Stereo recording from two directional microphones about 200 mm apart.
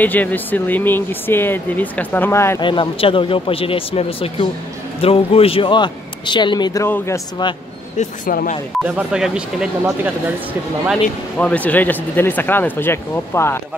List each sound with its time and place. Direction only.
0.0 s speech: 10° left (ahead or behind)
2.6 s a man's voice: 25° left (ahead or behind)
8.0 s speech: 40° left (ahead or behind)
8.8 s speech: 5° right (ahead or behind)
10.9 s speech: 5° left (ahead or behind)